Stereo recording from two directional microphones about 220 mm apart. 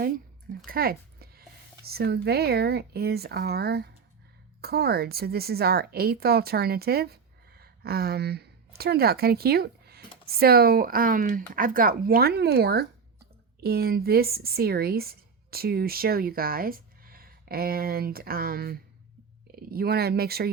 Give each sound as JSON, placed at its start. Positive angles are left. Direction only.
{"t": 0.7, "sound": "speech", "side_deg": -45}